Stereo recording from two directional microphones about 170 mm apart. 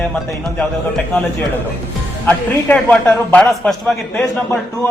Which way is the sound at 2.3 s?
10° left (ahead or behind).